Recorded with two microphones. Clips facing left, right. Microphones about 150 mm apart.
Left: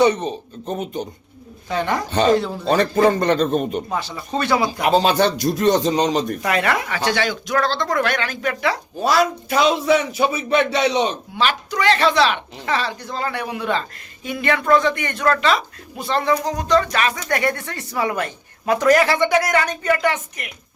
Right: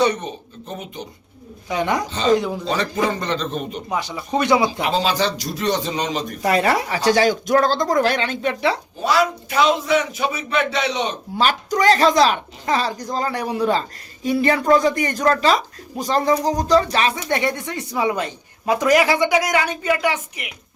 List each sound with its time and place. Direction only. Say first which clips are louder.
0.0 s speech: left 3 dB; 25° left (ahead or behind)
0.6 s a man's voice: left 7 dB; 45° left (ahead or behind)
1.7 s speech: left 1 dB; 15° right (ahead or behind)
2.6 s a man's voice: left 9 dB; 55° left (ahead or behind)
3.8 s speech: right 1 dB; 15° right (ahead or behind)
4.8 s a man's voice: left 4 dB; 50° left (ahead or behind)
6.4 s speech: right 2 dB; 35° right (ahead or behind)
9.0 s a man's voice: left 1 dB; 40° left (ahead or behind)
11.3 s speech: right 3 dB; 40° right (ahead or behind); by 20.5 s 10° right (ahead or behind)